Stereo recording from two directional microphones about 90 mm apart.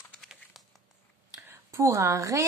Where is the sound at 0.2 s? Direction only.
Centre (ahead or behind).